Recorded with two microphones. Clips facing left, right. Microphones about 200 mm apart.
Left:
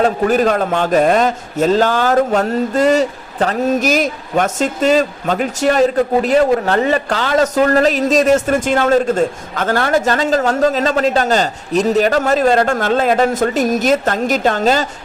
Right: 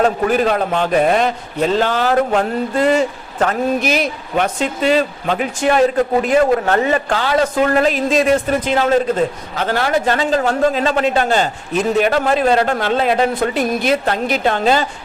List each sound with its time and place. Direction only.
0.0 s a man's voice: 40° left (ahead or behind)